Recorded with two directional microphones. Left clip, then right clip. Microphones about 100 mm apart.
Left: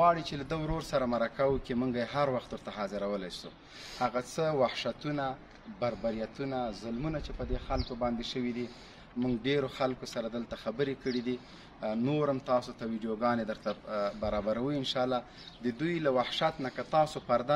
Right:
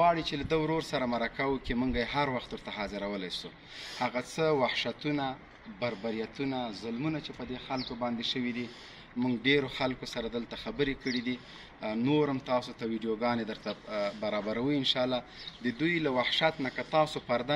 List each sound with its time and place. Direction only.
0.0 s a man's voice: 50° left (ahead or behind)
8.4 s a man's voice: 35° left (ahead or behind)